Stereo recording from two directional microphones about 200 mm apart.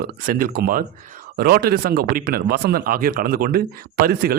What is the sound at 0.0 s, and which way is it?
Speech, 45° right (ahead or behind).